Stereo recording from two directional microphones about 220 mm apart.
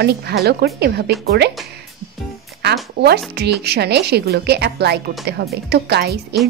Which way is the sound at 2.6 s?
50° right (ahead or behind).